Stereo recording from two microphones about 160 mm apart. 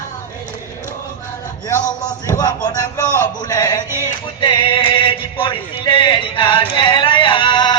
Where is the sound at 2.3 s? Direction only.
25° left (ahead or behind).